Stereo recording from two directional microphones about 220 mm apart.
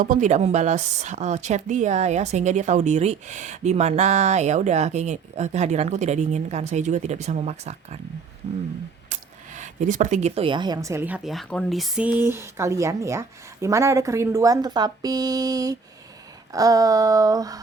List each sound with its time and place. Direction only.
0.0 s a woman's voice: 35° right (ahead or behind)
9.6 s a woman's voice: 35° right (ahead or behind); by 17.6 s 15° right (ahead or behind)